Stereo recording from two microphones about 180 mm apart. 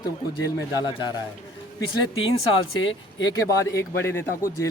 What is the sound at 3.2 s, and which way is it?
Speech, 20° left (ahead or behind).